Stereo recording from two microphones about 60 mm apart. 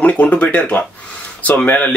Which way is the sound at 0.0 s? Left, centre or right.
Left.